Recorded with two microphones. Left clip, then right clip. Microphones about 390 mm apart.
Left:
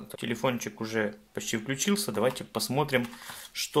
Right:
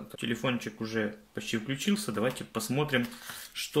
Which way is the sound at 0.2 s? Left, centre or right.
Centre.